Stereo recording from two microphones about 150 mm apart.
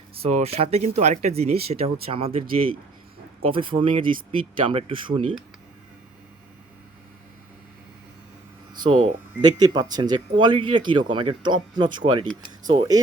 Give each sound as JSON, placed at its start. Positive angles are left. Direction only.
{"t": 0.2, "sound": "speech", "side_deg": -50}
{"t": 3.4, "sound": "speech", "side_deg": -35}
{"t": 9.0, "sound": "speech", "side_deg": -25}